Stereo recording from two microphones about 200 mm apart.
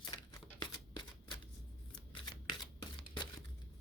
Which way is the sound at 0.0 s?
20° left (ahead or behind).